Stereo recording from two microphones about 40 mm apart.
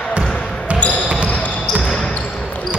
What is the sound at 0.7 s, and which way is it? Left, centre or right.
Basketball bounce, left.